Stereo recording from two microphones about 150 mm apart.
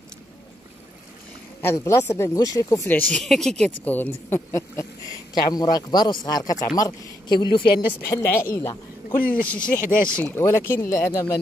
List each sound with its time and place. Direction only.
1.6 s a man's voice: 15° left (ahead or behind)
8.0 s a man's voice: 20° left (ahead or behind)